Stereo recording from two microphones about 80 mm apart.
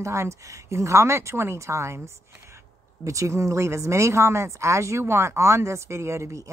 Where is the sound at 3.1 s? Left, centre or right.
Right.